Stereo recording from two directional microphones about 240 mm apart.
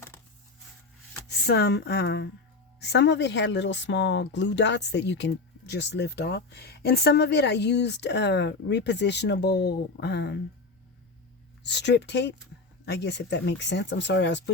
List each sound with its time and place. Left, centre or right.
1.3 s speech: left
11.6 s speech: left